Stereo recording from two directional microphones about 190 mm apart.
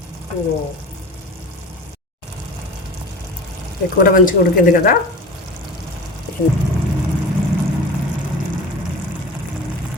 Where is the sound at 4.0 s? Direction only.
45° left (ahead or behind).